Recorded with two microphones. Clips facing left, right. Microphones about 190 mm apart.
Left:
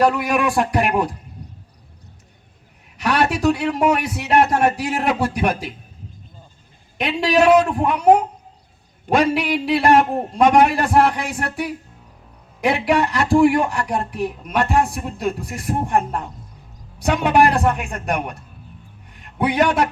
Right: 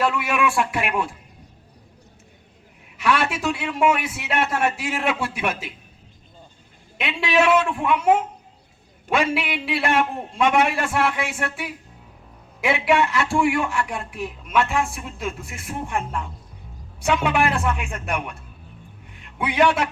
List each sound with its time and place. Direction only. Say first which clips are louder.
0.0 s speech: left 4 dB; 40° left (ahead or behind)
3.0 s speech: left 4 dB; 40° left (ahead or behind)
7.0 s a man's voice: left 4 dB; 40° left (ahead or behind)